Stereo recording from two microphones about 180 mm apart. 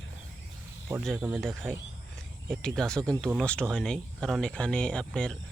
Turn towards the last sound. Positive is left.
turn(degrees=5)  # may be behind; listen again after turning